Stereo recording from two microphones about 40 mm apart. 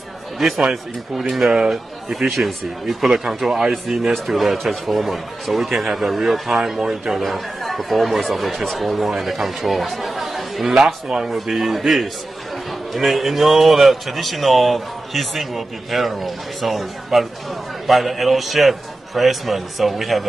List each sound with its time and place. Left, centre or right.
0.4 s speech: centre
1.5 s speech: centre
7.2 s speech: centre
11.1 s speech: centre